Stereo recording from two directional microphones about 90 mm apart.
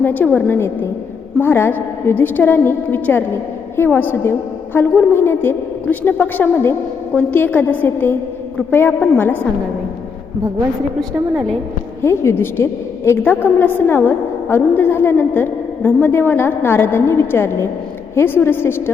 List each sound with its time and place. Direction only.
0.0 s a woman's voice: 20° left (ahead or behind)
12.0 s a woman's voice: 30° left (ahead or behind)